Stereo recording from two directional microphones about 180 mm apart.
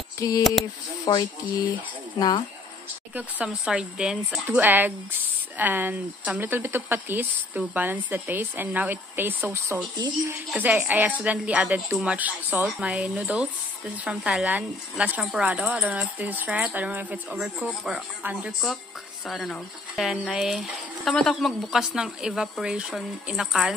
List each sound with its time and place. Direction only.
0.4 s speech: centre (ahead or behind)
1.1 s speech: 20° left (ahead or behind)
3.2 s speech: 5° right (ahead or behind); by 10.3 s 25° right (ahead or behind)
10.5 s speech: 10° right (ahead or behind)